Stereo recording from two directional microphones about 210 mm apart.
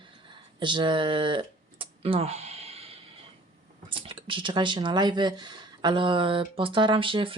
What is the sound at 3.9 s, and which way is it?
Speech, 25° right (ahead or behind).